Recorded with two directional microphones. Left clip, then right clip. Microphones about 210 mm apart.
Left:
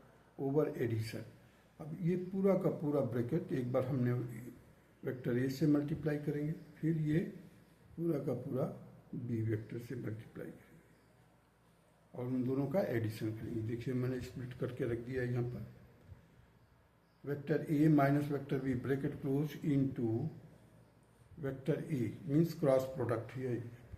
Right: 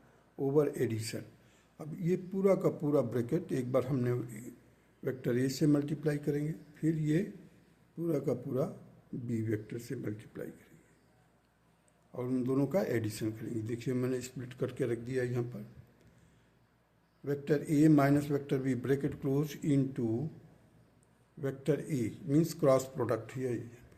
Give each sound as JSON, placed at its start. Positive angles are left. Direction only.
{"t": 0.4, "sound": "a man's voice", "side_deg": -60}
{"t": 12.1, "sound": "a man's voice", "side_deg": -55}
{"t": 17.2, "sound": "a man's voice", "side_deg": -55}
{"t": 21.4, "sound": "a man's voice", "side_deg": -55}